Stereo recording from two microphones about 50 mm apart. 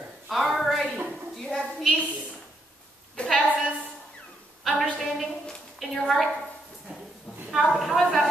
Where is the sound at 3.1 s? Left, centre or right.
Centre.